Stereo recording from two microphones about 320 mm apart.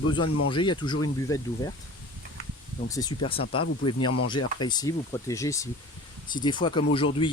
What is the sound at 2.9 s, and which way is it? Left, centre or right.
Speech, centre.